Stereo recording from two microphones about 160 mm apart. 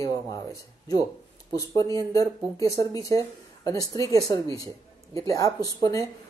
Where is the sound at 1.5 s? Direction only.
20° left (ahead or behind).